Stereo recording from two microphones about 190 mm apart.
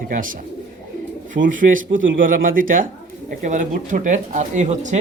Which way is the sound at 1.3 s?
45° right (ahead or behind).